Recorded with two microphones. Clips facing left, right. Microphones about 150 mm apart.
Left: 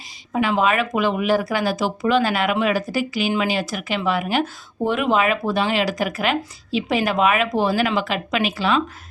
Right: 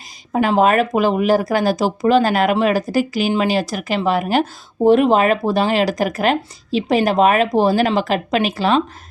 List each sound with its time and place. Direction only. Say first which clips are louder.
0.3 s speech: right 5 dB; 40° right (ahead or behind)